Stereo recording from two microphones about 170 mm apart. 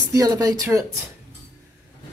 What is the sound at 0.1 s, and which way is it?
Speech, 20° right (ahead or behind).